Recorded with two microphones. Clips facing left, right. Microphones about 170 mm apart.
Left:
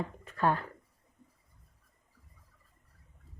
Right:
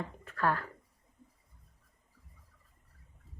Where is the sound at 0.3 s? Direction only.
20° left (ahead or behind).